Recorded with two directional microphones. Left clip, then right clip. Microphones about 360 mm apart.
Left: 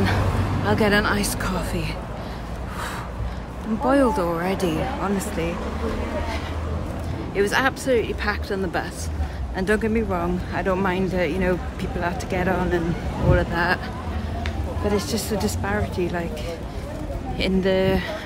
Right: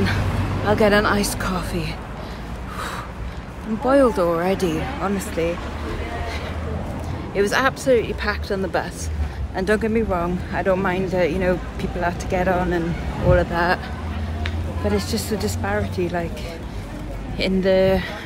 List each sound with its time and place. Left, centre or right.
0.7 s speech: centre
3.8 s speech: centre
7.3 s speech: centre
14.9 s speech: centre
17.4 s speech: centre